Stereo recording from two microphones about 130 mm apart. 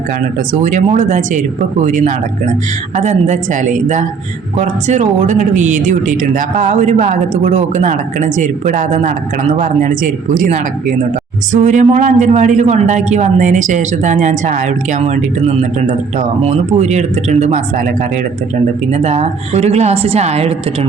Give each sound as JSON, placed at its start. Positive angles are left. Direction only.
{"t": 0.5, "sound": "speech", "side_deg": -75}
{"t": 2.9, "sound": "speech", "side_deg": -65}
{"t": 4.6, "sound": "speech", "side_deg": -65}
{"t": 11.5, "sound": "speech", "side_deg": -70}
{"t": 15.9, "sound": "speech", "side_deg": -65}
{"t": 18.9, "sound": "speech", "side_deg": -60}